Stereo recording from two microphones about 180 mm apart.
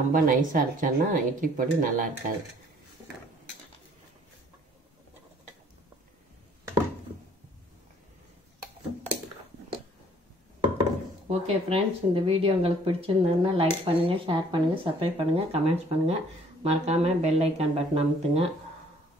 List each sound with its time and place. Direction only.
0.1 s speech: 50° right (ahead or behind)
10.8 s speech: 35° right (ahead or behind)